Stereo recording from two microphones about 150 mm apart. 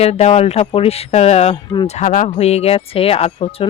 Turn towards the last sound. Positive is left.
turn(degrees=40)  # may be behind; listen again after turning